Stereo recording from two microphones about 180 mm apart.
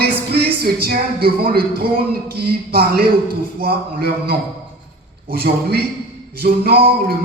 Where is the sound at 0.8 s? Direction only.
55° right (ahead or behind).